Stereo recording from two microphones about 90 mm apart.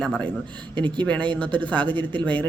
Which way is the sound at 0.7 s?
65° right (ahead or behind).